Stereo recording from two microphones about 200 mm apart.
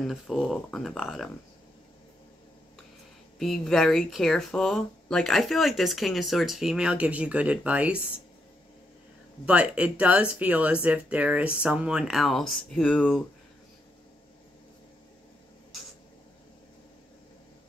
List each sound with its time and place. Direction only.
0.0 s speech: centre (ahead or behind)
3.3 s speech: centre (ahead or behind)
9.5 s speech: 5° right (ahead or behind)